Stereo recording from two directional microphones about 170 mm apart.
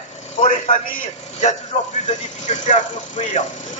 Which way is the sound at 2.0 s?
45° left (ahead or behind).